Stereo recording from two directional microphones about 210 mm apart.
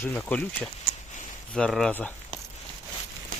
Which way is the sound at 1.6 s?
Centre (ahead or behind).